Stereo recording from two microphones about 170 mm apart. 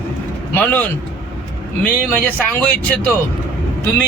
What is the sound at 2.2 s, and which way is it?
Speech, 10° left (ahead or behind).